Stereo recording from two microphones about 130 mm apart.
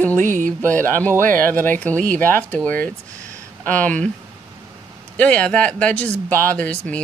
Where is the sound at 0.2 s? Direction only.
80° right.